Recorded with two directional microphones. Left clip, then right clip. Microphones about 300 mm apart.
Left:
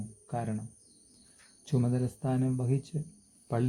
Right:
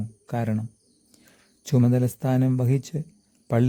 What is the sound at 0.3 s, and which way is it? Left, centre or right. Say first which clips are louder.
Speech: right 7 dB; right.